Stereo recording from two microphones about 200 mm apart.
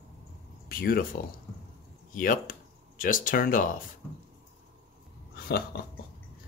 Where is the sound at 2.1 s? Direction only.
45° left (ahead or behind).